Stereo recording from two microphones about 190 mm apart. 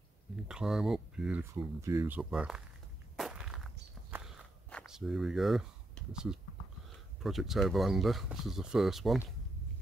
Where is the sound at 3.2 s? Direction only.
Centre (ahead or behind).